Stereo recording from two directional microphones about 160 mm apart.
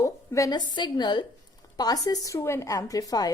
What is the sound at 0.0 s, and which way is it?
A woman's voice, 20° left (ahead or behind).